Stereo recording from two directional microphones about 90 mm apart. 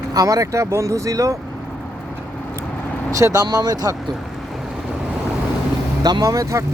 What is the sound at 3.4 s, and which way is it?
Speech, 45° right (ahead or behind).